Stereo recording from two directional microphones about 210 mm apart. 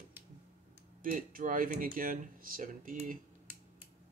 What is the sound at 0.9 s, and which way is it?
Speech, 40° right (ahead or behind).